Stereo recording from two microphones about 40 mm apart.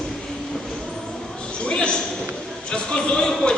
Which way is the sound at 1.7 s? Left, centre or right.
Left.